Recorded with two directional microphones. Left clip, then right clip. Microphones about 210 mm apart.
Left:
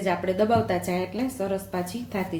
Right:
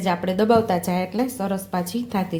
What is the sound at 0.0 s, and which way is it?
Speech, 40° right (ahead or behind).